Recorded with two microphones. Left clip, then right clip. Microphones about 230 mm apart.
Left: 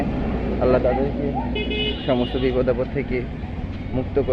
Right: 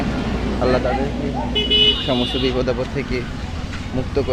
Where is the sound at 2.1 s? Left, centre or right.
Centre.